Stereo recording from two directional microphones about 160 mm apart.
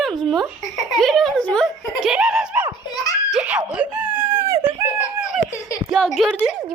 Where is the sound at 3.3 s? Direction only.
5° right (ahead or behind).